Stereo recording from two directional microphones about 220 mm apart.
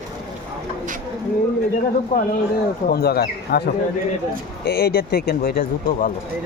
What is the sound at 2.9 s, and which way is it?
Speech, 45° left (ahead or behind).